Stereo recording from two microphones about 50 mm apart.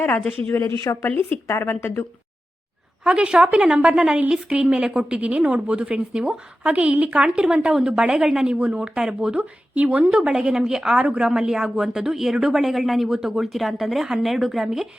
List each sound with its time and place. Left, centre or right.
0.5 s speech: left
1.0 s a woman's voice: left
3.0 s a woman's voice: centre
8.5 s speech: right
9.4 s a woman's voice: right
10.1 s speech: centre